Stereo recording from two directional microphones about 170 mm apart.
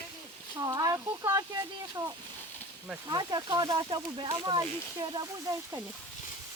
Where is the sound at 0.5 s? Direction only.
20° right (ahead or behind).